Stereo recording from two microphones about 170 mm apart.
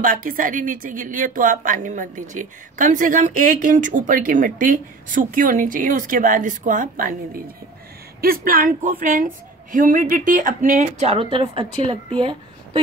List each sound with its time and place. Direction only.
0.0 s speech: 55° right (ahead or behind); by 12.8 s 30° right (ahead or behind)